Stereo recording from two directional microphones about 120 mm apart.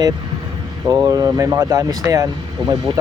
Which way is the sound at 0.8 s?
30° right (ahead or behind).